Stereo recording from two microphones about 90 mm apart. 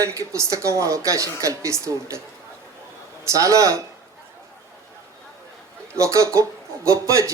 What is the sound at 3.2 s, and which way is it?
Speech, 35° right (ahead or behind).